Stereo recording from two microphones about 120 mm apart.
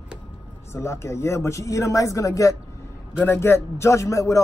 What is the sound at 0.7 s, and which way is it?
A man's voice, 25° left (ahead or behind).